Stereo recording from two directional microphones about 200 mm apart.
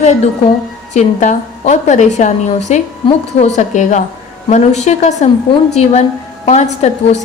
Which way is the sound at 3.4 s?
35° left (ahead or behind).